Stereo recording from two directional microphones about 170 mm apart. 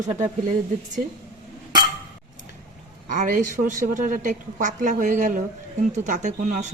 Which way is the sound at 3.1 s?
50° right (ahead or behind).